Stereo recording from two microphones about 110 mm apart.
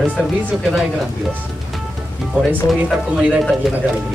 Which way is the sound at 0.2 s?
Centre (ahead or behind).